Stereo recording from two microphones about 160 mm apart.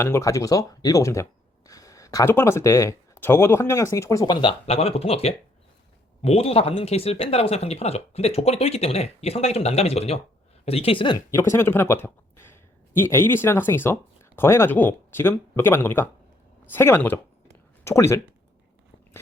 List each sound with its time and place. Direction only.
0.0 s speech: 15° left (ahead or behind)
4.4 s speech: 35° left (ahead or behind)
11.3 s speech: 15° left (ahead or behind)